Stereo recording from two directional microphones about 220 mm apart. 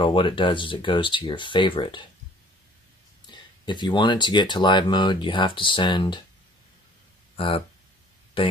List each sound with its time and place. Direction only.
0.0 s speech: 20° left (ahead or behind)
3.6 s speech: 20° left (ahead or behind)
7.3 s speech: 25° left (ahead or behind)